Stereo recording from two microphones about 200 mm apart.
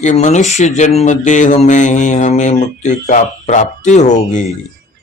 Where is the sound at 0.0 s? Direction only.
35° left (ahead or behind).